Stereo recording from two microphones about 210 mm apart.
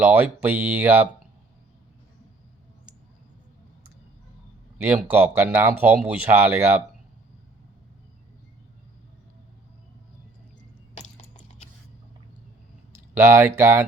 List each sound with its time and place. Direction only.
0.0 s speech: 5° right (ahead or behind)
5.1 s speech: 10° right (ahead or behind)
10.9 s a sound: 30° left (ahead or behind)
13.1 s speech: 10° right (ahead or behind)